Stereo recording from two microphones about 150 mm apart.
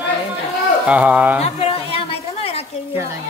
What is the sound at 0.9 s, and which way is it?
Speech, 10° right (ahead or behind).